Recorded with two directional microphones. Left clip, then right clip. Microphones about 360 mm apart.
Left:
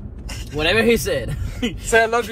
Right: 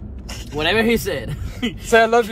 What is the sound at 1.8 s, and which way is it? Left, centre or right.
Speech, centre.